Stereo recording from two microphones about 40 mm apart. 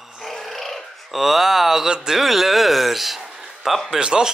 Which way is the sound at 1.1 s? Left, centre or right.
Centre.